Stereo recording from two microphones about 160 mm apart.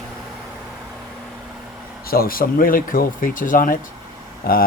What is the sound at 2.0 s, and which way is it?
Speech, 65° left (ahead or behind).